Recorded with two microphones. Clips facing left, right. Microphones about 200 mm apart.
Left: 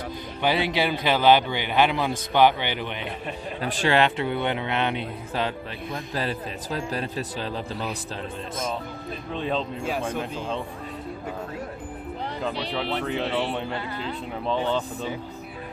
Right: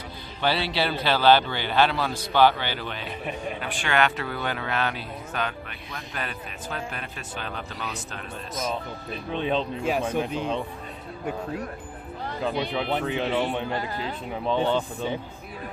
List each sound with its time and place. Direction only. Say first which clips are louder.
0.4 s a man's voice: left 2 dB; 15° left (ahead or behind)
3.6 s a man's voice: left 4 dB; 35° left (ahead or behind)
9.3 s speech: right 2 dB; centre (ahead or behind)
12.7 s speech: right 1 dB; 5° right (ahead or behind)
13.7 s speech: right 1 dB; 40° right (ahead or behind)